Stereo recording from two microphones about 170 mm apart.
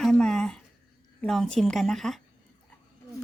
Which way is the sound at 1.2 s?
Centre (ahead or behind).